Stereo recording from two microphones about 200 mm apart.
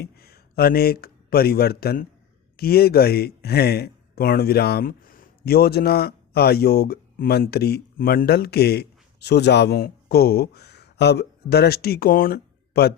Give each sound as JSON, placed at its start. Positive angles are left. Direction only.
{"t": 0.0, "sound": "speech", "side_deg": 50}